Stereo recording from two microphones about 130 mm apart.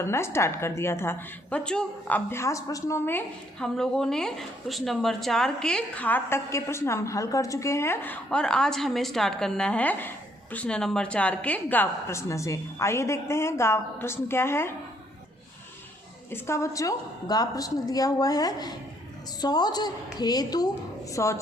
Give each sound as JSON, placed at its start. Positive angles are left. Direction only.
{"t": 0.0, "sound": "a woman's voice", "side_deg": 20}
{"t": 3.6, "sound": "a woman's voice", "side_deg": 5}
{"t": 16.3, "sound": "a woman's voice", "side_deg": 20}